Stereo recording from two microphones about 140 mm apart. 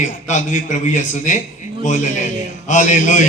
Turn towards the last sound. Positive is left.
turn(degrees=60)  # may be behind; listen again after turning